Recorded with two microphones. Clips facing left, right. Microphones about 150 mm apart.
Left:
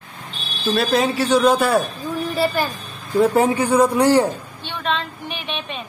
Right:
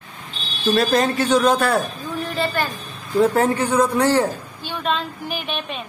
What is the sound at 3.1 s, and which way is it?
Speech, 10° left (ahead or behind).